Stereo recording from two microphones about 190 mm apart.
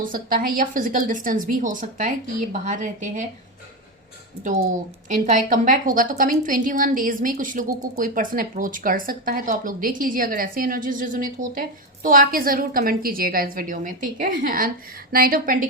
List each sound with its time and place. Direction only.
0.0 s speech: 50° right (ahead or behind)
4.4 s speech: 45° right (ahead or behind)